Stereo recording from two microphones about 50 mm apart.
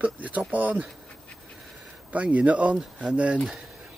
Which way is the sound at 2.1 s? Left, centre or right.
Right.